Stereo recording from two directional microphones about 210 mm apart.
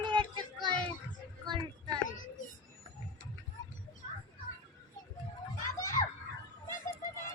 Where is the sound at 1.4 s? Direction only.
20° right (ahead or behind).